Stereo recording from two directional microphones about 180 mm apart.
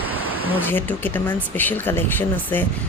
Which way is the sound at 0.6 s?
10° left (ahead or behind).